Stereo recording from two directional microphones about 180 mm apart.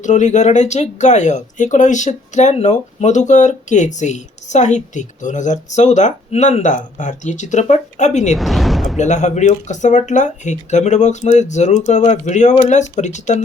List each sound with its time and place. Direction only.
0.0 s speech: 40° left (ahead or behind)
8.4 s speech: centre (ahead or behind)
9.0 s speech: 40° left (ahead or behind)